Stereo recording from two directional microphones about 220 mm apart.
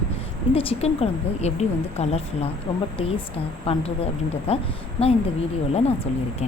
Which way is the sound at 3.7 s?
25° left (ahead or behind).